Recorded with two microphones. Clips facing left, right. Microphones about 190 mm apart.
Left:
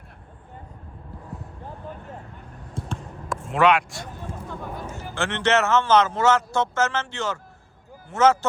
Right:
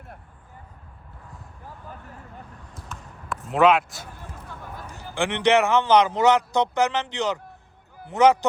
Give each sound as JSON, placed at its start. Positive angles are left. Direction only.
{"t": 2.7, "sound": "a sound", "side_deg": 30}
{"t": 3.5, "sound": "a man's voice", "side_deg": 0}
{"t": 4.9, "sound": "speech", "side_deg": -15}